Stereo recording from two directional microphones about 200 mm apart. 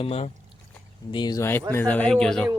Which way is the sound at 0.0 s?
30° left (ahead or behind).